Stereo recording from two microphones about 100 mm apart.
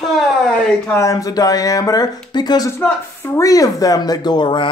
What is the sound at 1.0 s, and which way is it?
Speech, 35° left (ahead or behind).